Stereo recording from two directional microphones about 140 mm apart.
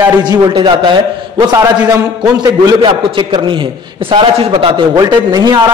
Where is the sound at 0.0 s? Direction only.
30° right (ahead or behind).